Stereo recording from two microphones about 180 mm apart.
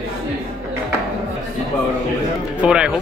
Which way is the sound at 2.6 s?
5° right (ahead or behind).